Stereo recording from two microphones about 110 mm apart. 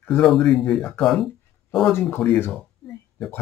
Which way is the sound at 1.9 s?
20° left (ahead or behind).